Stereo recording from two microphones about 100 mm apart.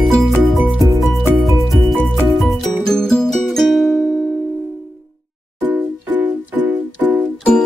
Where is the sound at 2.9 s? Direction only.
5° left (ahead or behind).